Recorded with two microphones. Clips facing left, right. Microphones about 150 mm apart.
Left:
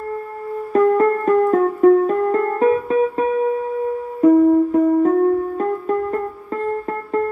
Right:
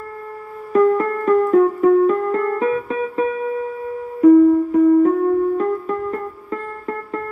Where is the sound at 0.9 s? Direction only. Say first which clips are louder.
Left 2 dB; 50° left (ahead or behind).